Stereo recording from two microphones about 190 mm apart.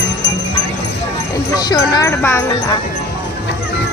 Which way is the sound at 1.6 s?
20° left (ahead or behind).